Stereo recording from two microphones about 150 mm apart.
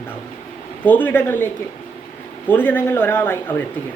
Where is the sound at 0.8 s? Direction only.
10° left (ahead or behind).